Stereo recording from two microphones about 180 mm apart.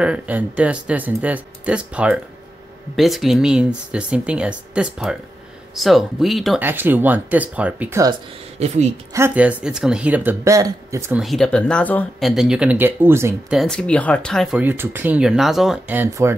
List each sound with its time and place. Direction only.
0.0 s speech: 5° right (ahead or behind)
6.6 s speech: 10° right (ahead or behind)
8.5 s a woman's voice: 40° right (ahead or behind)
9.1 s speech: 10° right (ahead or behind)
11.1 s speech: centre (ahead or behind)
12.3 s speech: 5° right (ahead or behind)
13.6 s speech: 5° left (ahead or behind)
14.6 s speech: 10° right (ahead or behind)